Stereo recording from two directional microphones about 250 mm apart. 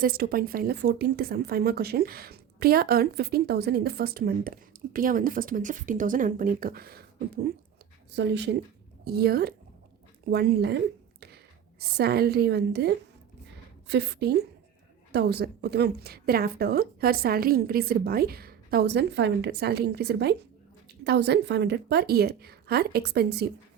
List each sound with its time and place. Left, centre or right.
0.0 s a woman's voice: right
11.8 s a woman's voice: right